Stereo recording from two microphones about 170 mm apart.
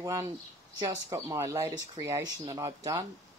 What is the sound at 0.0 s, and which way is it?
Speech, 20° right (ahead or behind).